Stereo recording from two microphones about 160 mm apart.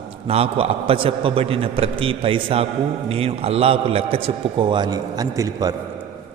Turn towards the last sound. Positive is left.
turn(degrees=-25)  # may be behind; listen again after turning